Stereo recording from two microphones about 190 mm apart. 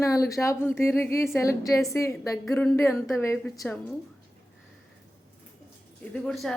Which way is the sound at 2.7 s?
15° left (ahead or behind).